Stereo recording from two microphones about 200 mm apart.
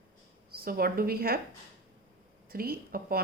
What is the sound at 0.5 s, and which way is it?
Speech, 50° right (ahead or behind).